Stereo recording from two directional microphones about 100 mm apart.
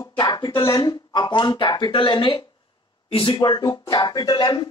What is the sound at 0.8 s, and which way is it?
Speech, 45° left (ahead or behind).